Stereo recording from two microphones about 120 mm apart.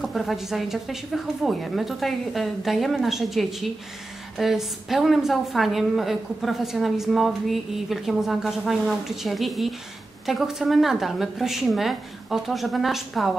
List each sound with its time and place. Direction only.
0.0 s a woman's voice: centre (ahead or behind)